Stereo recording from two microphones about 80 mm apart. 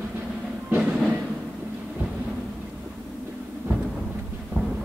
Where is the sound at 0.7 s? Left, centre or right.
Centre.